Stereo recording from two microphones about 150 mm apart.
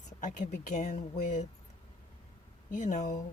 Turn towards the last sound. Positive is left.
turn(degrees=55)  # may be behind; listen again after turning